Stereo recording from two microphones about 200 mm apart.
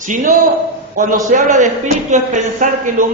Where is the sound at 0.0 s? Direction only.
40° right (ahead or behind).